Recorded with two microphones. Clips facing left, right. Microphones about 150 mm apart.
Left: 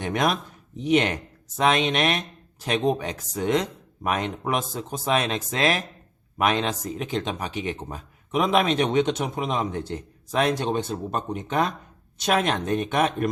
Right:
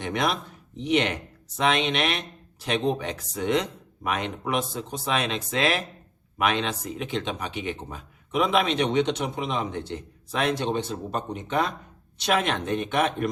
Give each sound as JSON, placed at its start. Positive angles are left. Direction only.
{"t": 0.0, "sound": "speech", "side_deg": 45}